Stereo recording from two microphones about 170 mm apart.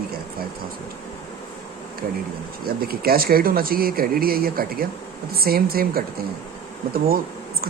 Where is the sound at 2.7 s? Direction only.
60° right (ahead or behind).